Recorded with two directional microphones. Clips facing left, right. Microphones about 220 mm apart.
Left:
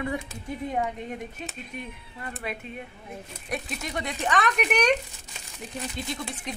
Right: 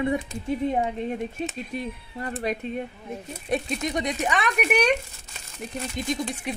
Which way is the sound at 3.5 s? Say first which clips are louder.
Right 6 dB; 20° right (ahead or behind).